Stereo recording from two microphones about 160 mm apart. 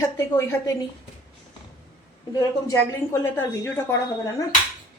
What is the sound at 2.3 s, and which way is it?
A woman's voice, 20° left (ahead or behind).